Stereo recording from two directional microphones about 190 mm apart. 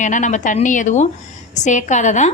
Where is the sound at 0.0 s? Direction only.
40° left (ahead or behind).